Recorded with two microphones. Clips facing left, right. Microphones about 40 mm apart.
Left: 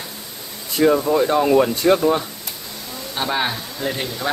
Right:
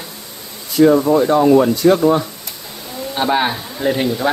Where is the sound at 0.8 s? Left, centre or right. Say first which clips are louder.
Right 5 dB; left.